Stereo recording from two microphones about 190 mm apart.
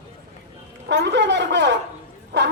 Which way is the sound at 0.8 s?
65° right (ahead or behind).